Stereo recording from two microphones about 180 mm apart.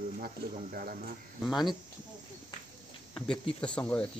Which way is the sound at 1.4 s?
Centre (ahead or behind).